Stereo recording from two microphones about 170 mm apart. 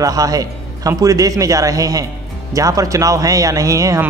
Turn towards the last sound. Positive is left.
turn(degrees=-20)  # may be behind; listen again after turning